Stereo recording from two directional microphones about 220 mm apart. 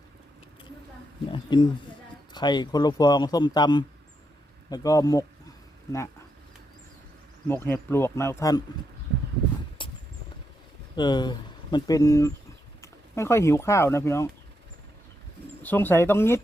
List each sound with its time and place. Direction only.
1.3 s speech: 20° left (ahead or behind)
7.4 s speech: 10° left (ahead or behind)
9.8 s horse: 20° left (ahead or behind)
10.9 s speech: 20° left (ahead or behind)
15.6 s speech: 10° left (ahead or behind)